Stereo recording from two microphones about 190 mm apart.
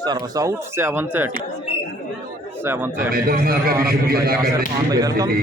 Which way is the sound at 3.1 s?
50° right (ahead or behind).